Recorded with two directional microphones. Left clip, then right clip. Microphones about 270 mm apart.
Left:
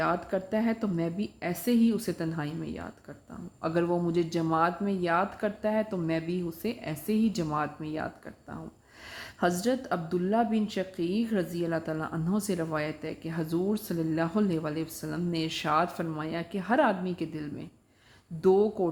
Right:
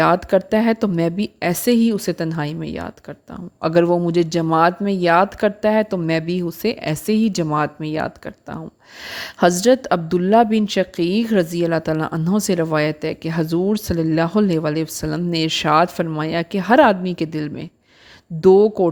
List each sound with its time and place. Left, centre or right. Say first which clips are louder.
0.0 s a woman's voice: right 13 dB; right